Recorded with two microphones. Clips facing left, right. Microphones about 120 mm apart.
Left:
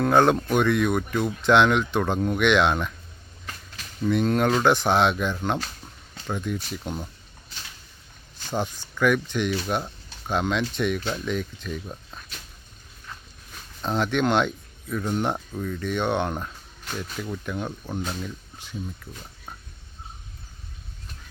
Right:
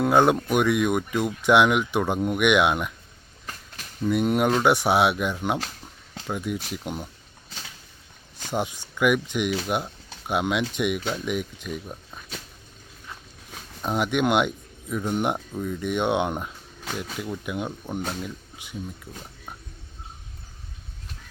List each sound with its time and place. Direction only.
0.0 s speech: 10° right (ahead or behind)
4.0 s speech: 10° right (ahead or behind)
8.4 s speech: 15° right (ahead or behind)
13.8 s speech: 10° right (ahead or behind)